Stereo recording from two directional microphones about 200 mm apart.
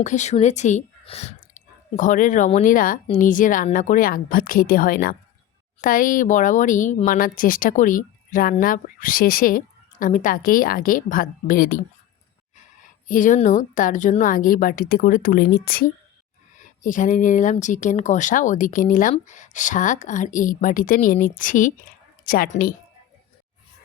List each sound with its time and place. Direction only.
0.0 s speech: 35° left (ahead or behind)
13.1 s a woman's voice: 40° left (ahead or behind)